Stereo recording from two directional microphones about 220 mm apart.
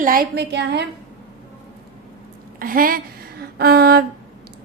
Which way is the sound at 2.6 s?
40° right (ahead or behind).